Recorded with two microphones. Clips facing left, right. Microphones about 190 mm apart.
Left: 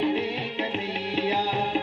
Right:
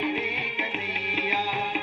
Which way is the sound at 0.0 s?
30° left (ahead or behind).